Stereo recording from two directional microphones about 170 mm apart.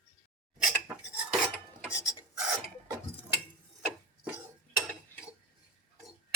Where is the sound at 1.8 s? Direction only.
5° right (ahead or behind).